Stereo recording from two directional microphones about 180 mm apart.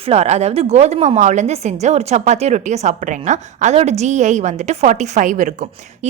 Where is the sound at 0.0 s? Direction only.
35° right (ahead or behind).